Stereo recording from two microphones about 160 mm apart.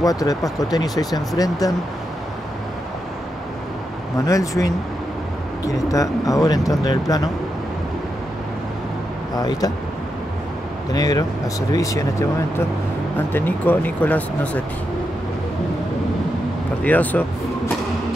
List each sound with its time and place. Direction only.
0.0 s speech: 20° left (ahead or behind)
4.3 s speech: 20° left (ahead or behind)
5.9 s speech: 20° left (ahead or behind)
9.3 s speech: 25° left (ahead or behind)
10.9 s speech: 25° left (ahead or behind)
16.8 s speech: 10° left (ahead or behind)